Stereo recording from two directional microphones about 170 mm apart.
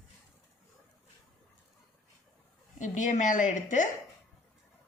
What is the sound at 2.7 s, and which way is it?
A woman's voice, 45° left (ahead or behind).